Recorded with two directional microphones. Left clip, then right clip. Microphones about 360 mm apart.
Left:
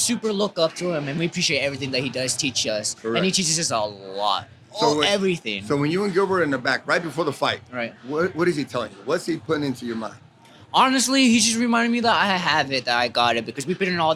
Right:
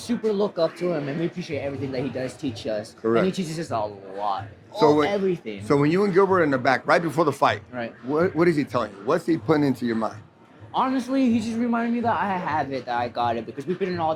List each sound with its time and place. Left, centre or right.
0.0 s speech: left
1.4 s a man's voice: left
1.9 s a man's voice: left
5.6 s speech: centre
10.7 s a man's voice: left